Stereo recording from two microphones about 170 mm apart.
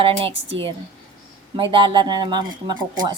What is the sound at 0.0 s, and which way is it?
Speech, 30° right (ahead or behind).